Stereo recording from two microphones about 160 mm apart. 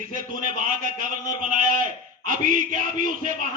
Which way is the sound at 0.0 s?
60° right (ahead or behind).